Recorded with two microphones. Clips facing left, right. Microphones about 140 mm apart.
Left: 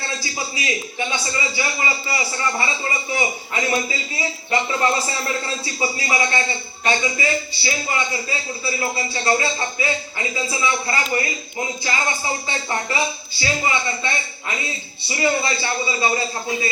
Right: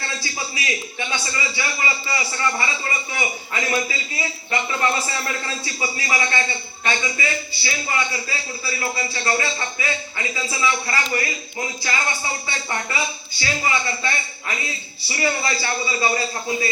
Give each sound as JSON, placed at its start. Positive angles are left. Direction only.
{"t": 0.2, "sound": "a man's voice", "side_deg": 25}